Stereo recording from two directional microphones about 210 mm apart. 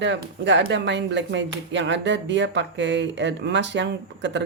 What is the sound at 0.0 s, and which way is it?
Speech, 60° right (ahead or behind).